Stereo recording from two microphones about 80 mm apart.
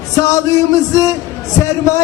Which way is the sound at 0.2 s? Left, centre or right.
Left.